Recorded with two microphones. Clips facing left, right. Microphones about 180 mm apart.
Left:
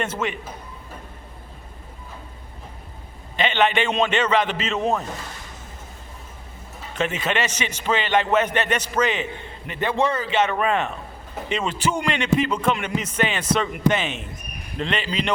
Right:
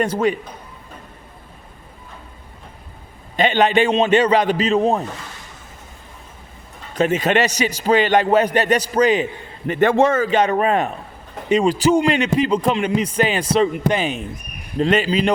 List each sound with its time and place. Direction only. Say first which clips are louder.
0.0 s a man's voice: right 8 dB; 40° right (ahead or behind)
3.3 s a man's voice: right 5 dB; 40° right (ahead or behind)
6.9 s a man's voice: right 7 dB; 40° right (ahead or behind)
9.6 s a man's voice: right 8 dB; 50° right (ahead or behind)